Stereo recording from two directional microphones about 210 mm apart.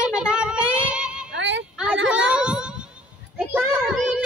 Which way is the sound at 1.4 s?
60° right (ahead or behind).